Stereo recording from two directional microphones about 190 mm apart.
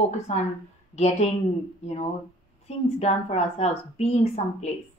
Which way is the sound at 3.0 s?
35° left (ahead or behind).